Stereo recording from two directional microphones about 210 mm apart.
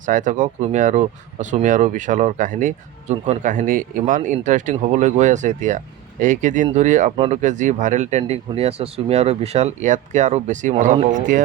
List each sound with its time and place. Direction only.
0.0 s speech: 40° right (ahead or behind)